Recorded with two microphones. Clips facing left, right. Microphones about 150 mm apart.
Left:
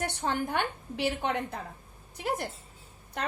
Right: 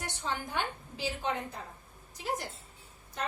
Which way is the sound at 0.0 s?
55° left (ahead or behind).